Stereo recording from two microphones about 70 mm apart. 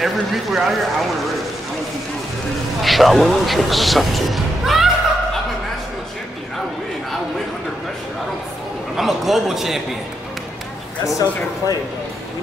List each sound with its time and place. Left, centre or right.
0.0 s speech: centre
2.8 s speech: centre
8.9 s speech: centre
11.1 s speech: left